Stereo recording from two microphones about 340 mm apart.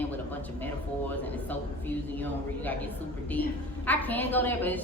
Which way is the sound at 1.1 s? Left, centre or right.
Centre.